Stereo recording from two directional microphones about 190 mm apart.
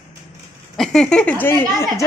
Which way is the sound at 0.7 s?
Centre (ahead or behind).